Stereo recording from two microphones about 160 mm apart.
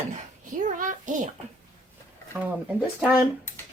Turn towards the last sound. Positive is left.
turn(degrees=-5)  # may be behind; listen again after turning